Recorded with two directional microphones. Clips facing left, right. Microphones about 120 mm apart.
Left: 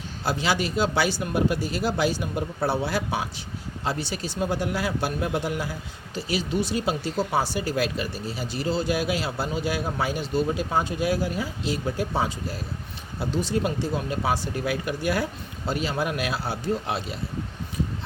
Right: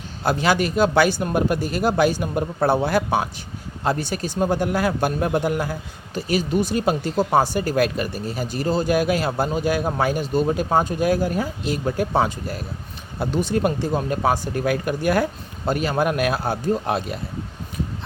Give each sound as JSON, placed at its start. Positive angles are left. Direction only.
{"t": 0.2, "sound": "speech", "side_deg": -55}